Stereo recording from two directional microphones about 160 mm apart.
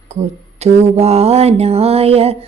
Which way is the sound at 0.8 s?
40° right (ahead or behind).